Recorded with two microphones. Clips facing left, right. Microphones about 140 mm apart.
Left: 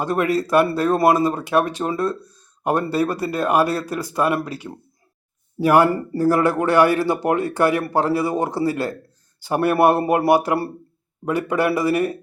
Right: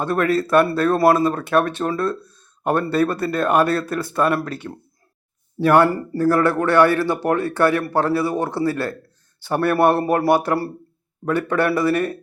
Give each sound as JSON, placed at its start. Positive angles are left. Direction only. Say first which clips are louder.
{"t": 0.0, "sound": "speech", "louder": "right 1 dB", "side_deg": 15}
{"t": 10.0, "sound": "speech", "louder": "even", "side_deg": 20}
{"t": 10.2, "sound": "speech", "louder": "left 1 dB", "side_deg": 10}